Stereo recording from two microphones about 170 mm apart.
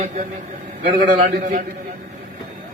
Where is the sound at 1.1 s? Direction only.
50° right (ahead or behind).